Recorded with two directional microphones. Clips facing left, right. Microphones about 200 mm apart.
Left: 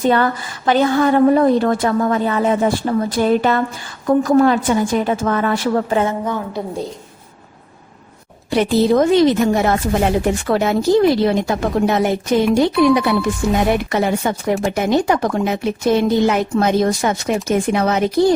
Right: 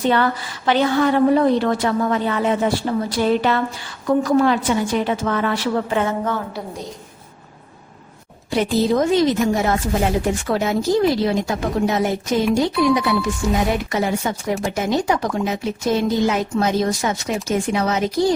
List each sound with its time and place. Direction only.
0.0 s a woman's voice: 45° left (ahead or behind)
6.1 s a woman's voice: 15° left (ahead or behind)
8.4 s speech: 65° left (ahead or behind)